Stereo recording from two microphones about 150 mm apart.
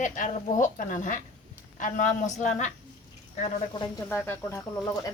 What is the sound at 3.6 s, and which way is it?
Speech, 30° left (ahead or behind).